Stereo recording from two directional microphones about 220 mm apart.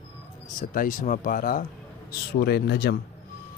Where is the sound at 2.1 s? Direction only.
45° left (ahead or behind).